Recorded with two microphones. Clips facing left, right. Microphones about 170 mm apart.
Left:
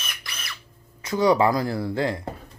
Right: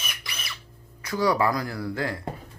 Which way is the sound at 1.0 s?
20° left (ahead or behind).